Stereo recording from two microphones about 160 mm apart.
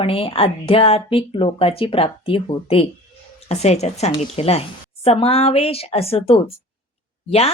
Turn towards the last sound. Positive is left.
turn(degrees=40)  # may be behind; listen again after turning